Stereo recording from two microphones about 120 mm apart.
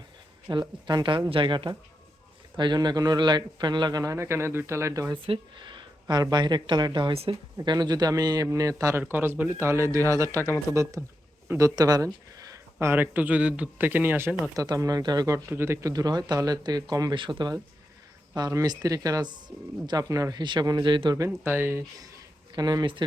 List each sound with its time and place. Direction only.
0.5 s a man's voice: 35° right (ahead or behind)
5.1 s a man's voice: 45° right (ahead or behind); by 10.4 s 25° right (ahead or behind)
10.7 s speech: 30° left (ahead or behind)
11.4 s speech: 25° right (ahead or behind)
14.5 s a man's voice: 30° right (ahead or behind)
15.4 s a man's voice: 20° right (ahead or behind); by 17.5 s 40° right (ahead or behind)
18.3 s a man's voice: 30° right (ahead or behind)
20.4 s a man's voice: 40° right (ahead or behind)
21.2 s a man's voice: 15° right (ahead or behind); by 23.0 s 40° right (ahead or behind)